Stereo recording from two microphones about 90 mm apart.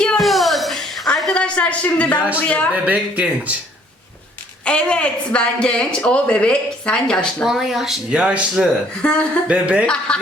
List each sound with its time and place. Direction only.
0.0 s a sound: 5° left (ahead or behind)
2.1 s speech: 15° right (ahead or behind)
4.6 s speech: 10° left (ahead or behind)
7.4 s speech: 5° right (ahead or behind)
8.2 s speech: 15° right (ahead or behind)
9.0 s speech: 10° left (ahead or behind)
9.5 s speech: 15° right (ahead or behind)
9.8 s speech: 10° left (ahead or behind)